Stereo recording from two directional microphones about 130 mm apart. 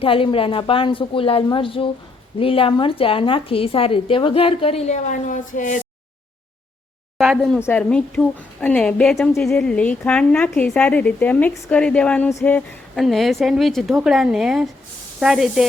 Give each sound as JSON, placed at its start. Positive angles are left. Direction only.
{"t": 0.0, "sound": "a woman's voice", "side_deg": 45}
{"t": 7.2, "sound": "a woman's voice", "side_deg": 0}
{"t": 7.6, "sound": "a woman's voice", "side_deg": 15}
{"t": 13.0, "sound": "a woman's voice", "side_deg": 0}